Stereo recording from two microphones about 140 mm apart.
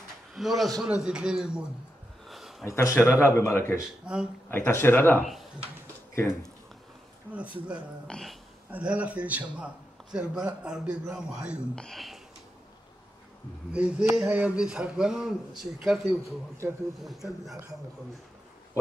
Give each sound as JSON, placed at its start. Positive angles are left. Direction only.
{"t": 0.3, "sound": "a man's voice", "side_deg": 0}
{"t": 2.2, "sound": "a sound", "side_deg": 0}
{"t": 2.6, "sound": "a man's voice", "side_deg": 20}
{"t": 4.0, "sound": "a man's voice", "side_deg": -5}
{"t": 4.5, "sound": "speech", "side_deg": 15}
{"t": 7.3, "sound": "a man's voice", "side_deg": -10}
{"t": 8.6, "sound": "a man's voice", "side_deg": -10}
{"t": 11.7, "sound": "a man's voice", "side_deg": 5}
{"t": 13.7, "sound": "a man's voice", "side_deg": -5}